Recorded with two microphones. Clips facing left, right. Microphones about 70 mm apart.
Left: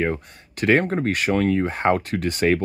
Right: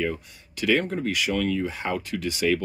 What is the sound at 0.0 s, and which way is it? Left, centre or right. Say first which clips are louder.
Speech: left 4 dB; left.